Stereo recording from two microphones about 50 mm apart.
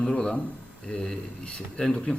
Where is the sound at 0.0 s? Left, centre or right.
Centre.